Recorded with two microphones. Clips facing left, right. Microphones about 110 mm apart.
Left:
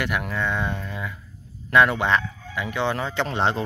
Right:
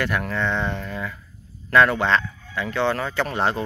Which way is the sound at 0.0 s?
15° left (ahead or behind).